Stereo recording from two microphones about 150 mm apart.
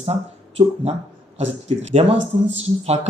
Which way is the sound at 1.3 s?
45° right (ahead or behind).